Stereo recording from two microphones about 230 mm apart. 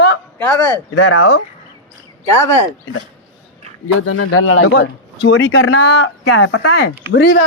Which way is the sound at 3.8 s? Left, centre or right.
Left.